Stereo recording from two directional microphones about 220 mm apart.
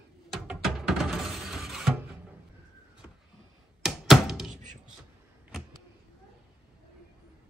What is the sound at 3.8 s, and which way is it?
Thunk, centre (ahead or behind).